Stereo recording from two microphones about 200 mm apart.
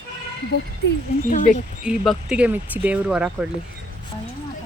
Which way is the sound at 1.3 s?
40° left (ahead or behind).